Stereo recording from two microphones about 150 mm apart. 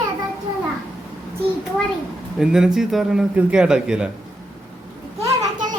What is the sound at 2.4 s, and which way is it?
A man's voice, 5° right (ahead or behind).